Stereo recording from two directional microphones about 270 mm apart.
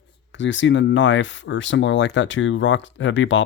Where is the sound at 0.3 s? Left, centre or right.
Left.